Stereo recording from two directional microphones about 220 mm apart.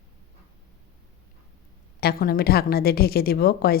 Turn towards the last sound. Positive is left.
turn(degrees=45)  # may be behind; listen again after turning